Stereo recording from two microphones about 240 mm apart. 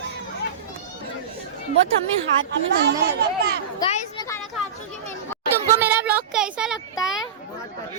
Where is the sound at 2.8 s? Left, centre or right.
Right.